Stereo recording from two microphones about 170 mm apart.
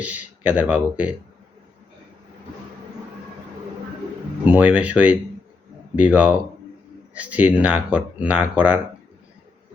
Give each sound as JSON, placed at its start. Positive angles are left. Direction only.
{"t": 0.0, "sound": "speech", "side_deg": -10}
{"t": 4.4, "sound": "speech", "side_deg": -10}